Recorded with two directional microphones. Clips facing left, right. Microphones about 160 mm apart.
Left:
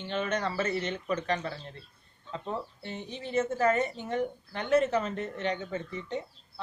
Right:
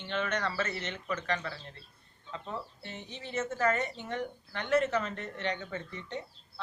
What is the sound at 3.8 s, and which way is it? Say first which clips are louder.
Speech: left 5 dB; 15° left (ahead or behind).